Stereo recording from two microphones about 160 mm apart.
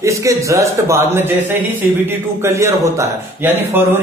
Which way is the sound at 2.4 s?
15° right (ahead or behind).